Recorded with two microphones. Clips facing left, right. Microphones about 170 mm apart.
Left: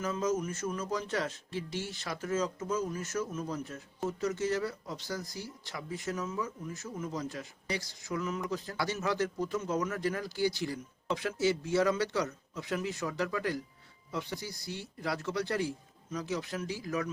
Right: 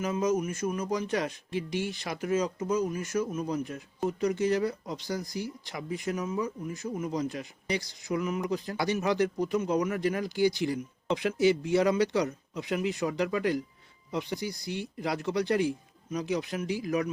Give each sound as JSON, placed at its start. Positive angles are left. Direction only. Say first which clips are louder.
{"t": 0.0, "sound": "speech", "louder": "right 4 dB", "side_deg": -15}